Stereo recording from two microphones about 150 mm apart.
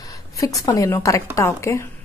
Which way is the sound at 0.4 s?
20° left (ahead or behind).